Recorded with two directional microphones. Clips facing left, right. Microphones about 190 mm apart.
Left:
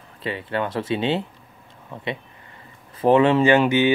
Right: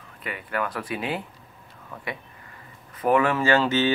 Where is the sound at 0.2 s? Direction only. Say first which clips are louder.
Left 4 dB; 30° left (ahead or behind).